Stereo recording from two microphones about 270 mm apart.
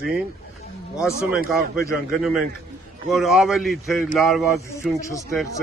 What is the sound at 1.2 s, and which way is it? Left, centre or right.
A man's voice, centre.